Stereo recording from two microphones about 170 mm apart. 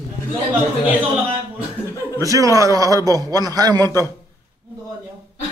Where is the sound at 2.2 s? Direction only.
20° right (ahead or behind).